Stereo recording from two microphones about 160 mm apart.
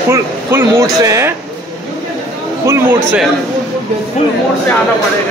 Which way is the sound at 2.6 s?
15° right (ahead or behind).